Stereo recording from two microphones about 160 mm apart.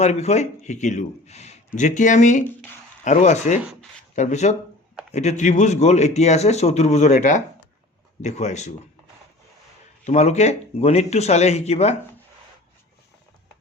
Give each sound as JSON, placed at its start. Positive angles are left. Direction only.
{"t": 0.0, "sound": "speech", "side_deg": 45}
{"t": 10.0, "sound": "speech", "side_deg": 45}